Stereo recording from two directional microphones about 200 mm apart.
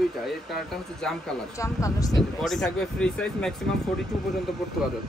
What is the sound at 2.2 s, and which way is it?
Speech, centre (ahead or behind).